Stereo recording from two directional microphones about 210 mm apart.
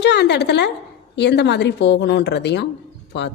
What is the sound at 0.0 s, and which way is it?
A woman's voice, 55° left (ahead or behind).